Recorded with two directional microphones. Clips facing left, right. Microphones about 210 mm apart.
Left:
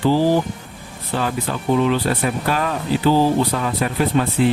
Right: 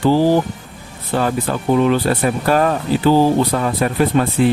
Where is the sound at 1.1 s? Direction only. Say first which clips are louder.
Right 4 dB; 45° right (ahead or behind).